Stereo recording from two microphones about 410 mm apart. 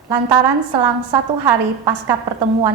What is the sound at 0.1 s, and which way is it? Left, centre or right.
A woman's voice, right.